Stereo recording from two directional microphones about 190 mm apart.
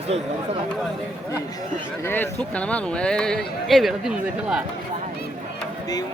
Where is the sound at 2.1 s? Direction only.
10° left (ahead or behind).